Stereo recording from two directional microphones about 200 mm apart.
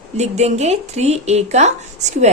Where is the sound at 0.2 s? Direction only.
35° right (ahead or behind).